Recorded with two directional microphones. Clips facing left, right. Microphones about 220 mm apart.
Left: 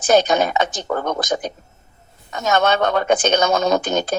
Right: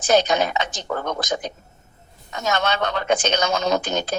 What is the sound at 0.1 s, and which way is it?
Speech, 50° left (ahead or behind).